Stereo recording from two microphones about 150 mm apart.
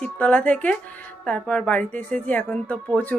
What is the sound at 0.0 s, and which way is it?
A woman's voice, 10° left (ahead or behind).